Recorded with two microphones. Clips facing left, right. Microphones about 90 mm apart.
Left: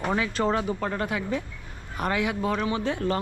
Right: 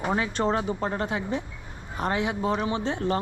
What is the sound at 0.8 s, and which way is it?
Speech, 25° right (ahead or behind).